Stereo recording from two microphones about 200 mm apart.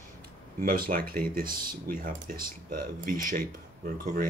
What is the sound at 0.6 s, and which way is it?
Speech, 45° right (ahead or behind).